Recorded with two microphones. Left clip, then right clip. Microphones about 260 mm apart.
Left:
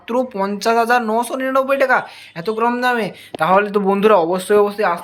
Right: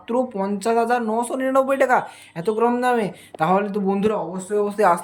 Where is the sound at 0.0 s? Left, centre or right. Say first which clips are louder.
Left 3 dB; centre.